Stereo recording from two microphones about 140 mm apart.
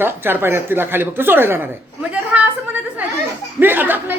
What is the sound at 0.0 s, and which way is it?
Speech, 15° right (ahead or behind).